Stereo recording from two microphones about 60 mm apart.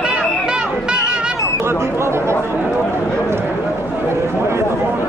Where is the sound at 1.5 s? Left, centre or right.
Right.